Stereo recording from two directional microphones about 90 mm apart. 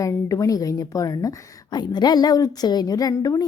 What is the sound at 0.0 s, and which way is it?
A woman's voice, 40° left (ahead or behind).